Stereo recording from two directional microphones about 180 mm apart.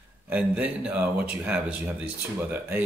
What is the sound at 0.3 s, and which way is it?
Speech, 10° right (ahead or behind).